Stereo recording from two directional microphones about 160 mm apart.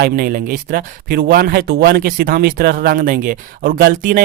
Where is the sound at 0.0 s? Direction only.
70° right (ahead or behind).